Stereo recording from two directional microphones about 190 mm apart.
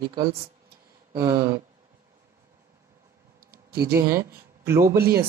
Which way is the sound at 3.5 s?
55° right (ahead or behind).